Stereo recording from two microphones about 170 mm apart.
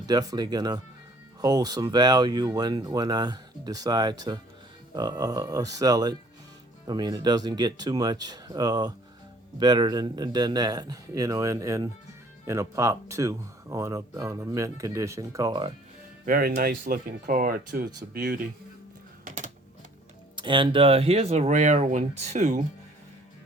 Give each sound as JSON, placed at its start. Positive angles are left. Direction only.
{"t": 0.1, "sound": "speech", "side_deg": -20}
{"t": 16.2, "sound": "speech", "side_deg": -55}
{"t": 17.7, "sound": "speech", "side_deg": -70}
{"t": 19.2, "sound": "typing", "side_deg": -50}
{"t": 20.3, "sound": "speech", "side_deg": -30}